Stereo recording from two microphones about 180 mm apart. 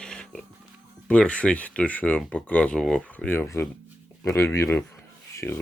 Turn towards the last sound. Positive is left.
turn(degrees=15)  # may be behind; listen again after turning